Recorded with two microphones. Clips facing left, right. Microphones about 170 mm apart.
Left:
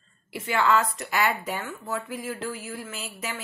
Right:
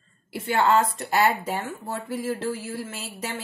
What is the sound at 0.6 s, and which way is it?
Speech, 35° right (ahead or behind).